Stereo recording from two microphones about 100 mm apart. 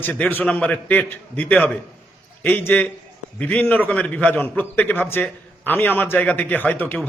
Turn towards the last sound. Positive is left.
turn(degrees=20)  # may be behind; listen again after turning